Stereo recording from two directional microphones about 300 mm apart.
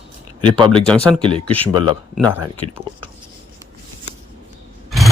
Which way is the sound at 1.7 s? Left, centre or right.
Left.